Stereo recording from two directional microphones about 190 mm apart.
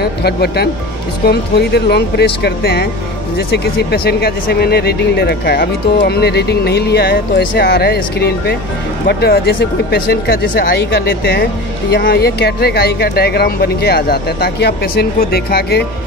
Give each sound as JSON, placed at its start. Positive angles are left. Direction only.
{"t": 0.0, "sound": "speech", "side_deg": 55}